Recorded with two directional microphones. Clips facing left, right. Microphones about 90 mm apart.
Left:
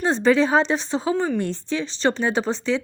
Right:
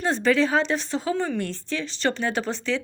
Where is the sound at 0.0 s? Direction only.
25° left (ahead or behind).